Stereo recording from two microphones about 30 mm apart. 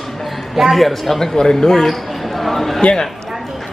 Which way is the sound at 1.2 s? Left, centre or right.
Left.